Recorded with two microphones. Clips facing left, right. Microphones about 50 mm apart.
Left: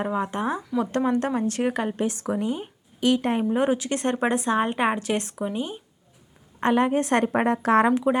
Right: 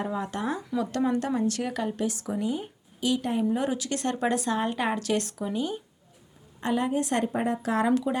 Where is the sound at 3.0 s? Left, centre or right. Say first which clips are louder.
Left 4 dB; left.